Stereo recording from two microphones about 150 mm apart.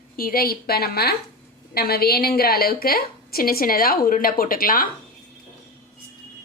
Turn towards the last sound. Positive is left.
turn(degrees=70)  # may be behind; listen again after turning